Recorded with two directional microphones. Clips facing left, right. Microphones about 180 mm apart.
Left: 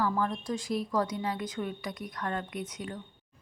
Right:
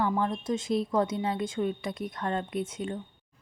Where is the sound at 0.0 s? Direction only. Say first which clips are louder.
Right 2 dB; 20° right (ahead or behind).